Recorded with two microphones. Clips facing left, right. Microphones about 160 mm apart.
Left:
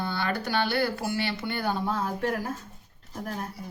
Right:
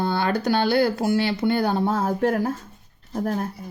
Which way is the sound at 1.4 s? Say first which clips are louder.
Right 8 dB; 50° right (ahead or behind).